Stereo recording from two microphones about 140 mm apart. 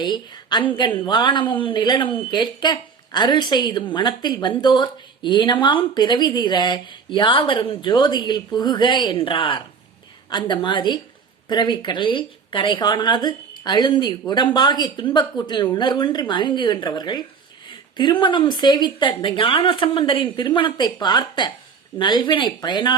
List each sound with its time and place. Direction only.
0.0 s speech: 30° left (ahead or behind)